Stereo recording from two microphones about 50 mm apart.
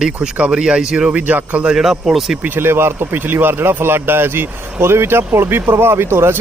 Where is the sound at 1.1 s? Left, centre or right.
Right.